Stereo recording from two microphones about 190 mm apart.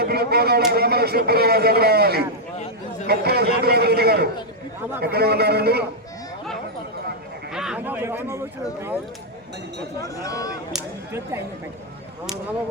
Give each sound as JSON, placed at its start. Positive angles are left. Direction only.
{"t": 0.0, "sound": "a man's voice", "side_deg": -55}
{"t": 7.5, "sound": "a man's voice", "side_deg": -5}
{"t": 10.0, "sound": "speech", "side_deg": 20}